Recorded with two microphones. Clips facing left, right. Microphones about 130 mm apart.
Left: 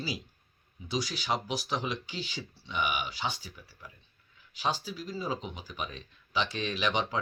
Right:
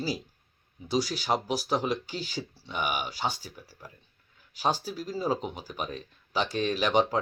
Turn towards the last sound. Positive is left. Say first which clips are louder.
# right 6 dB
turn(degrees=-40)  # may be behind; listen again after turning